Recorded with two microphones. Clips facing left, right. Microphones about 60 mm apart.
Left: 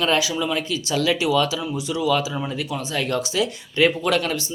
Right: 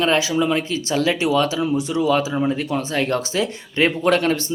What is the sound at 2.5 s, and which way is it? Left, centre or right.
Speech, right.